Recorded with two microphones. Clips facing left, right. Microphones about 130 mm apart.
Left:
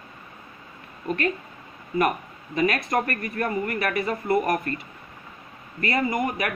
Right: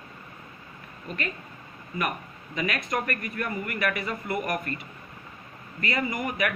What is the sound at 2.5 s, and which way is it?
Speech, 45° left (ahead or behind).